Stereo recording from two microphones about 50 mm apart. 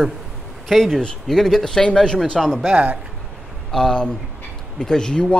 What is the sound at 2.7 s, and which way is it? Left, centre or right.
Speech, right.